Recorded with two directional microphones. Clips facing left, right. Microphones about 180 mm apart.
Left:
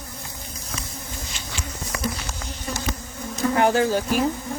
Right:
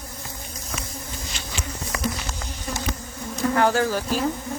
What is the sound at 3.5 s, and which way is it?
Speech, 20° left (ahead or behind).